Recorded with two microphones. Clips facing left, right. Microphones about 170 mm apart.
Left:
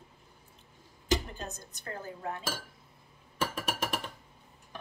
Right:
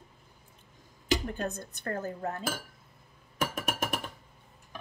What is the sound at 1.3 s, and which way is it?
Speech, 60° right (ahead or behind).